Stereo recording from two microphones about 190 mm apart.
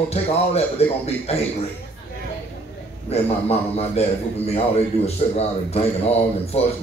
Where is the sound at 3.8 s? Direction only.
35° left (ahead or behind).